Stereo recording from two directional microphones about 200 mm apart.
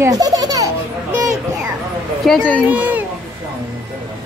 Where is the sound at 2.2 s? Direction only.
5° left (ahead or behind).